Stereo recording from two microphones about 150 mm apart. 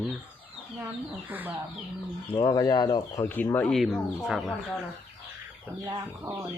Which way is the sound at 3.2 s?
10° left (ahead or behind).